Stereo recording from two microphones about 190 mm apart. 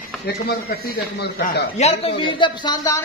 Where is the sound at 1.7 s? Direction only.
35° left (ahead or behind).